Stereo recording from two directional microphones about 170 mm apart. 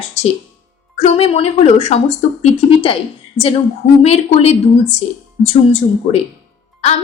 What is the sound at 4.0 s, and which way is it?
A woman's voice, 40° left (ahead or behind).